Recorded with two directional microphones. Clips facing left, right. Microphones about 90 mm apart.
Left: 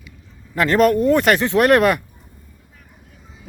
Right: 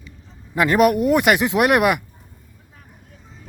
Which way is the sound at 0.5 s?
10° right (ahead or behind).